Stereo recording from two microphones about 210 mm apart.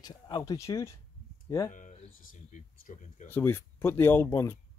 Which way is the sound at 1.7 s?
40° left (ahead or behind).